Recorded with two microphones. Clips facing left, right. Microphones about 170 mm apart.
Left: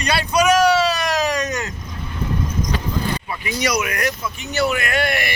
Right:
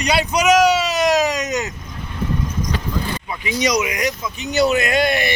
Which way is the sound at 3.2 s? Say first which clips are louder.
Right 2 dB; 15° right (ahead or behind).